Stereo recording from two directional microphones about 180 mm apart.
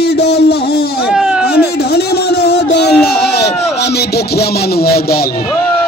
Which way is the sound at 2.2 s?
65° left (ahead or behind).